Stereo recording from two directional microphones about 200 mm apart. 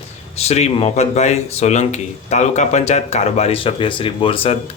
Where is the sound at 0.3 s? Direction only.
30° left (ahead or behind).